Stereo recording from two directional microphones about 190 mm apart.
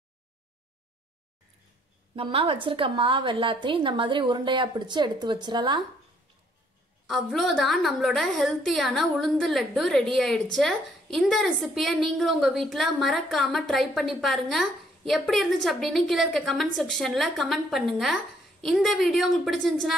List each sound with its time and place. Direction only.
2.1 s a woman's voice: 30° right (ahead or behind)
7.1 s a woman's voice: centre (ahead or behind)